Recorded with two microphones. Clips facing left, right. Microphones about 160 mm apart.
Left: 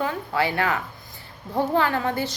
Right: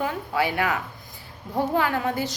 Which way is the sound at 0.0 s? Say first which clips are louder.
Left 1 dB; 15° right (ahead or behind).